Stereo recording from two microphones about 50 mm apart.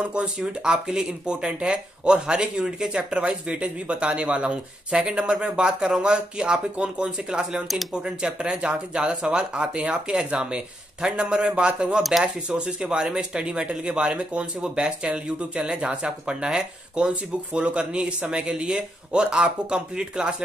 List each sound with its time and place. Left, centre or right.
0.0 s speech: centre
7.6 s speech: centre
7.9 s speech: centre
12.0 s speech: centre
12.4 s speech: centre